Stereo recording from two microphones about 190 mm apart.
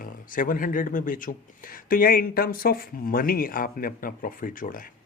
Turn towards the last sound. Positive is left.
turn(degrees=45)  # may be behind; listen again after turning